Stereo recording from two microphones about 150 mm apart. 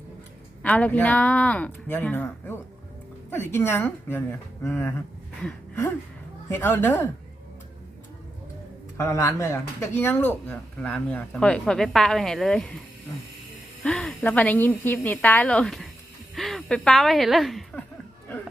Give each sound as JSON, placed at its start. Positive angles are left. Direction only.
{"t": 0.6, "sound": "speech", "side_deg": 10}
{"t": 6.5, "sound": "speech", "side_deg": 15}
{"t": 9.0, "sound": "speech", "side_deg": 20}
{"t": 13.8, "sound": "speech", "side_deg": 5}